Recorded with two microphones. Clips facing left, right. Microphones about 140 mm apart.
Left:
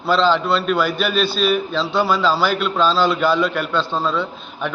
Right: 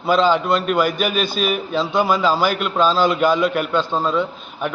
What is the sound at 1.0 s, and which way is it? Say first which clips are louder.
Speech: left 1 dB; 10° right (ahead or behind).